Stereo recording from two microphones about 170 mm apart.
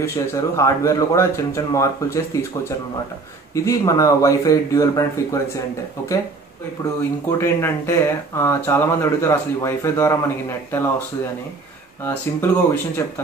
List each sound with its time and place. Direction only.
0.0 s speech: 15° left (ahead or behind)
3.5 s speech: 20° left (ahead or behind)
6.8 s speech: 15° left (ahead or behind)
12.0 s speech: 15° left (ahead or behind)